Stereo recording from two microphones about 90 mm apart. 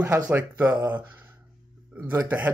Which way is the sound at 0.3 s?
20° right (ahead or behind).